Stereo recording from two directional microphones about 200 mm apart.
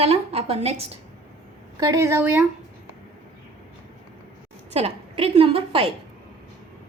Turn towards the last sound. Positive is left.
turn(degrees=-25)  # may be behind; listen again after turning